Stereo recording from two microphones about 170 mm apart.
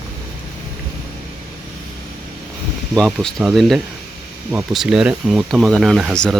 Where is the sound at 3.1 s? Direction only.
Centre (ahead or behind).